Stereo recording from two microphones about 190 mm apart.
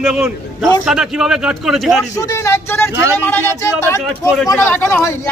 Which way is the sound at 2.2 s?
15° left (ahead or behind).